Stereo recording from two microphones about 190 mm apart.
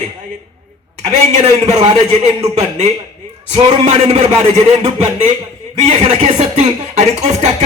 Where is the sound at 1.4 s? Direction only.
35° right (ahead or behind).